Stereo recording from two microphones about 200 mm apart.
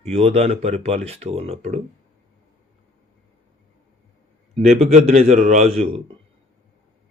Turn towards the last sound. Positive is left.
turn(degrees=-35)  # may be behind; listen again after turning